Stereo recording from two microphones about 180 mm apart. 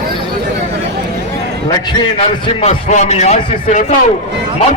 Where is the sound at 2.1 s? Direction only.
35° left (ahead or behind).